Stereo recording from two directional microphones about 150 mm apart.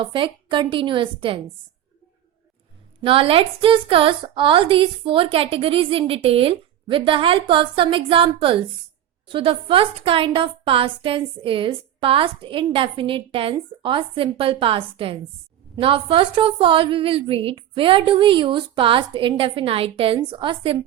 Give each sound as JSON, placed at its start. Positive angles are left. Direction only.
{"t": 0.0, "sound": "a woman's voice", "side_deg": -35}
{"t": 3.0, "sound": "a woman's voice", "side_deg": -35}